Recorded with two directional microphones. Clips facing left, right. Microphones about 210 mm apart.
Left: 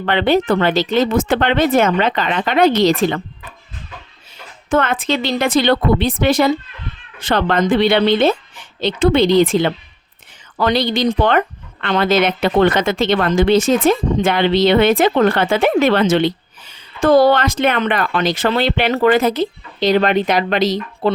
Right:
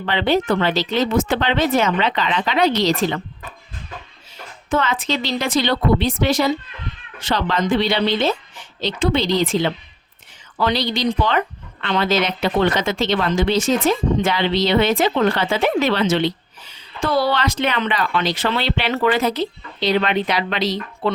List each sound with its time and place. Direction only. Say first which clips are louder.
0.0 s speech: left 4 dB; 55° left (ahead or behind)
4.7 s speech: left 4 dB; 55° left (ahead or behind)